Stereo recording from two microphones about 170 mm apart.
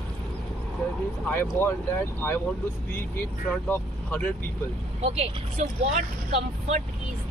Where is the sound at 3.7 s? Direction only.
10° left (ahead or behind).